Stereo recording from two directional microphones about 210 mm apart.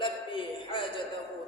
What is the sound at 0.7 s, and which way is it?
Speech, 25° left (ahead or behind).